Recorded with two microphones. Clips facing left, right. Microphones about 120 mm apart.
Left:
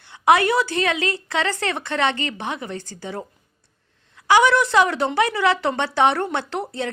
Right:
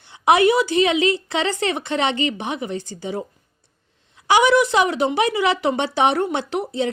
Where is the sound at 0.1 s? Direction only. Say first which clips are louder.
Right 2 dB; 20° right (ahead or behind).